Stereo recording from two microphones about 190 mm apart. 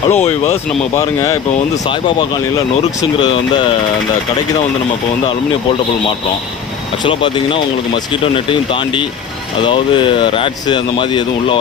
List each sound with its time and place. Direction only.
0.1 s speech: 35° left (ahead or behind)
0.5 s speech: 15° left (ahead or behind)
1.8 s speech: 25° left (ahead or behind)
3.2 s speech: 25° left (ahead or behind)
7.0 s speech: 25° left (ahead or behind)